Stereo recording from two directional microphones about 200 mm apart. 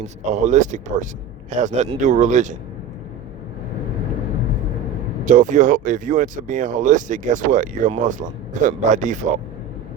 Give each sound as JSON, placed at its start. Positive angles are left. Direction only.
{"t": 0.0, "sound": "speech", "side_deg": -35}
{"t": 5.2, "sound": "speech", "side_deg": -40}